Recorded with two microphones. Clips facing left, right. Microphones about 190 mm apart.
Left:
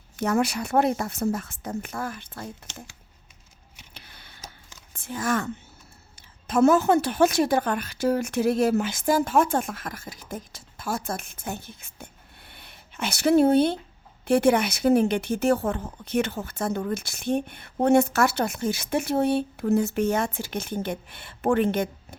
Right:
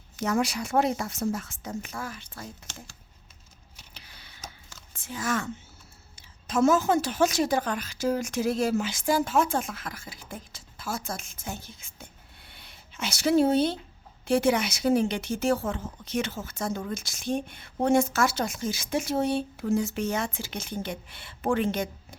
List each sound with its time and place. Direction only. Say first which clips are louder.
0.2 s a woman's voice: left 3 dB; 60° left (ahead or behind)
3.9 s a sound: left 3 dB; 55° left (ahead or behind)
4.9 s speech: left 4 dB; 55° left (ahead or behind)
6.5 s a woman's voice: left 4 dB; 60° left (ahead or behind)